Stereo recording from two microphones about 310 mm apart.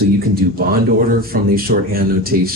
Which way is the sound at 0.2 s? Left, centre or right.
Right.